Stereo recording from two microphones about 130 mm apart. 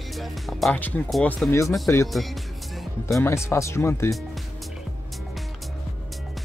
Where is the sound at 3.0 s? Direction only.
20° left (ahead or behind).